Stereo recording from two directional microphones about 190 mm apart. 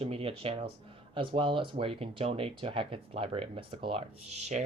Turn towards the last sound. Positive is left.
turn(degrees=-35)  # may be behind; listen again after turning